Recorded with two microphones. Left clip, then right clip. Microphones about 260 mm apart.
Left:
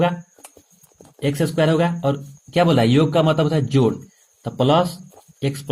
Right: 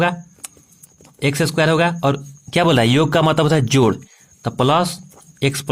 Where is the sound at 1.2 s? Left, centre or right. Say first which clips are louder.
Right 2 dB; right.